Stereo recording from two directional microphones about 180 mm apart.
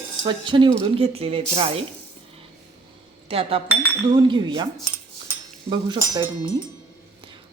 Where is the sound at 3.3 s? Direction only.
30° right (ahead or behind).